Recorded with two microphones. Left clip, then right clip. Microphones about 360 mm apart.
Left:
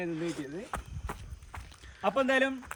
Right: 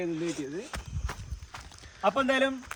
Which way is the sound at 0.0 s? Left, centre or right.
Centre.